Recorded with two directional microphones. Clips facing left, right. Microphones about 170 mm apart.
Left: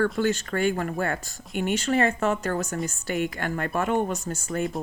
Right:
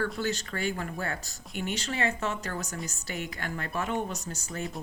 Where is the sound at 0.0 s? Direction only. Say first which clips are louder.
Left 7 dB; 50° left (ahead or behind).